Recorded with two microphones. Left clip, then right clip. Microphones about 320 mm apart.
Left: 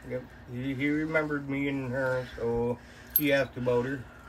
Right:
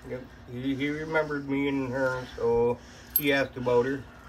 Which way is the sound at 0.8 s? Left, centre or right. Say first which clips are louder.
Left 1 dB; right.